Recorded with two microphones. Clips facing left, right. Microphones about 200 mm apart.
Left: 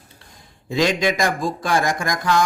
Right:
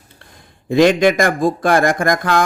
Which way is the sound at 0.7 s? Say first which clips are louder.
Right 8 dB; 55° right (ahead or behind).